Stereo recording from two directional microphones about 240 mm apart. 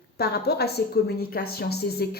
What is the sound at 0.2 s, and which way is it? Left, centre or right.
A woman's voice, left.